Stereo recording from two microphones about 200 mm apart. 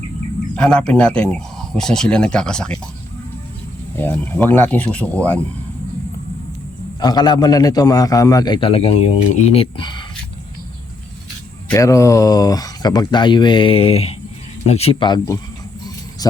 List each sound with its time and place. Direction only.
0.5 s speech: 5° left (ahead or behind)
3.9 s speech: 10° left (ahead or behind)
7.0 s a man's voice: 20° left (ahead or behind)
11.7 s a man's voice: 15° left (ahead or behind)